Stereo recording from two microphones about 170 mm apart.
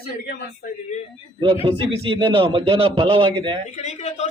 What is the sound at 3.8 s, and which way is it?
Speech, 40° left (ahead or behind).